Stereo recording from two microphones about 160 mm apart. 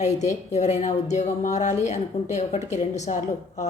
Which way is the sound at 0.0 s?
45° left (ahead or behind).